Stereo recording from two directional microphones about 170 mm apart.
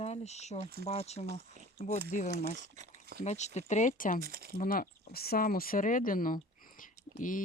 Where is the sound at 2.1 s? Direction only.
50° left (ahead or behind).